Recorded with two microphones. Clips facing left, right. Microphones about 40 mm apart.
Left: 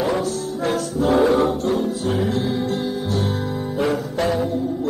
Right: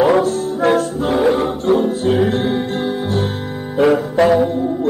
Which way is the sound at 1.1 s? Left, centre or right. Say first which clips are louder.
Right 1 dB; right.